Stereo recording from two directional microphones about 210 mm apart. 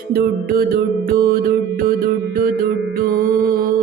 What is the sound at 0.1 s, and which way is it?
Music, 45° right (ahead or behind).